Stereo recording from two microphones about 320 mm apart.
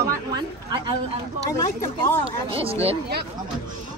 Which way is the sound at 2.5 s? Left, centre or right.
Centre.